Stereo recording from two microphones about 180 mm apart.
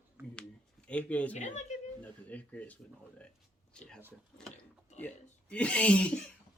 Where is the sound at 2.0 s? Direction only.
10° left (ahead or behind).